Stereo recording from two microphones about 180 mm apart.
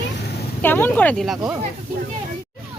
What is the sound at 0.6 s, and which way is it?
Speech, 10° left (ahead or behind).